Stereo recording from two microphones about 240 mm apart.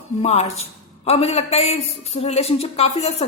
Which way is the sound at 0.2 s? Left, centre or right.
Left.